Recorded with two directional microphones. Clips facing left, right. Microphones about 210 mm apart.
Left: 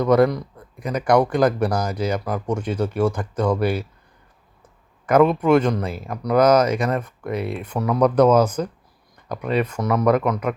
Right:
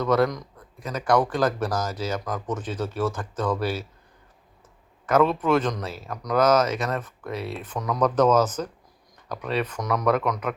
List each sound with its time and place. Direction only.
0.9 s speech: 15° left (ahead or behind)
5.0 s speech: 10° left (ahead or behind)
7.3 s speech: 55° left (ahead or behind)
7.6 s speech: 10° left (ahead or behind)